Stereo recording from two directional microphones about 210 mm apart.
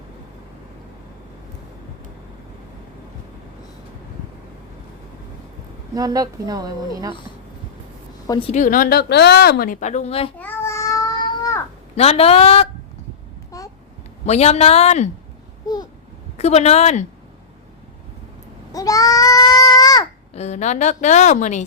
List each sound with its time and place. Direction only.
5.9 s a woman's voice: 15° right (ahead or behind)
8.3 s a woman's voice: 25° left (ahead or behind)
10.4 s babbling: 15° left (ahead or behind)
11.9 s a man's voice: 30° left (ahead or behind)
13.5 s babbling: 15° left (ahead or behind)
14.3 s a woman's voice: 30° left (ahead or behind)
15.6 s babbling: 20° left (ahead or behind)
16.4 s a woman's voice: 30° left (ahead or behind)
18.7 s goat: 15° left (ahead or behind)
20.3 s a woman's voice: 30° left (ahead or behind)